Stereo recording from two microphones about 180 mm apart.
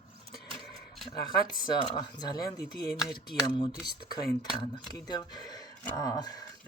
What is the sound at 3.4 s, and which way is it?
Speech, 25° left (ahead or behind).